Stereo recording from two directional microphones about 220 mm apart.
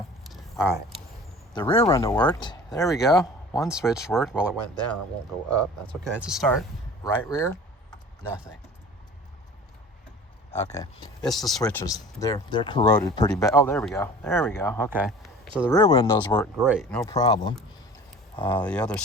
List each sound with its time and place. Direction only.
0.3 s a sound: centre (ahead or behind)
1.5 s speech: 20° left (ahead or behind)
2.9 s speech: centre (ahead or behind)
6.2 s speech: centre (ahead or behind)
7.0 s typing: 15° left (ahead or behind)
10.5 s speech: 10° left (ahead or behind)
11.3 s speech: centre (ahead or behind)
14.8 s speech: 5° right (ahead or behind)
15.7 s speech: 15° left (ahead or behind)
16.6 s speech: 5° right (ahead or behind)
17.1 s speech: 15° left (ahead or behind)
18.4 s speech: 5° left (ahead or behind)